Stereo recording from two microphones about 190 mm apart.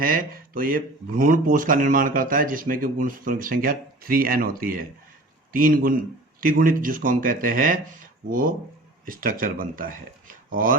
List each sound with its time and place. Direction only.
0.0 s speech: 50° right (ahead or behind)